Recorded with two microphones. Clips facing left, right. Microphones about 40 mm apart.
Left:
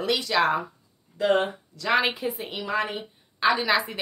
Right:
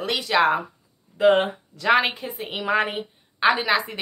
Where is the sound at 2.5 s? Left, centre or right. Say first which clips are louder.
Right 8 dB; right.